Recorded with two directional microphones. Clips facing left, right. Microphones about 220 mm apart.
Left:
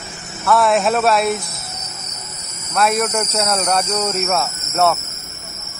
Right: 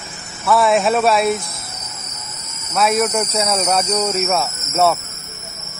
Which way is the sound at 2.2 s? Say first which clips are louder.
Even; 45° left (ahead or behind).